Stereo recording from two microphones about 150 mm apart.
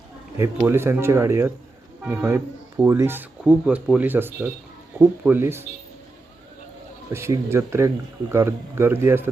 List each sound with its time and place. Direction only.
0.3 s speech: 15° right (ahead or behind)
7.1 s speech: 15° right (ahead or behind)